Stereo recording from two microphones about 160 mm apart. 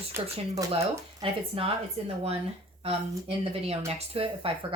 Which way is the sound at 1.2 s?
35° right (ahead or behind).